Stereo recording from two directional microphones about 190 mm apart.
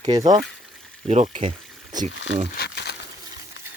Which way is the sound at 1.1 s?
35° right (ahead or behind).